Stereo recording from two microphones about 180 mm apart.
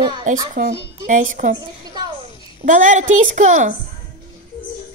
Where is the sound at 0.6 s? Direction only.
65° right (ahead or behind).